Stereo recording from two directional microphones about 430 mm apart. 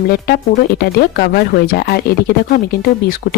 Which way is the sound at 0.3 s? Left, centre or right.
Left.